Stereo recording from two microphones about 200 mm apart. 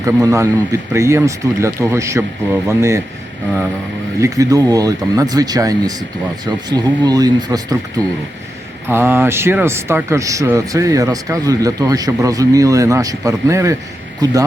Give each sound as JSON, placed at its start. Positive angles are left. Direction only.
{"t": 0.0, "sound": "speech", "side_deg": -15}
{"t": 4.2, "sound": "speech", "side_deg": -15}